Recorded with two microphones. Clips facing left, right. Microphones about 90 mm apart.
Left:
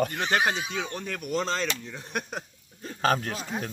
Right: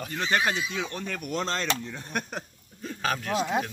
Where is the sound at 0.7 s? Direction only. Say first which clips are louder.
Even; centre (ahead or behind).